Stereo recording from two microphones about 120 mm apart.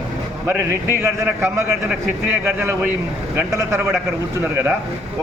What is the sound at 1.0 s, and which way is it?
A man's voice, 20° right (ahead or behind).